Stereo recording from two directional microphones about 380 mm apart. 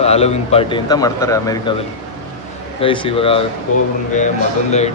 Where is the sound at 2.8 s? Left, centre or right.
Centre.